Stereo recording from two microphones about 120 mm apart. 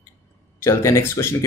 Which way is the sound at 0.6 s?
25° left (ahead or behind).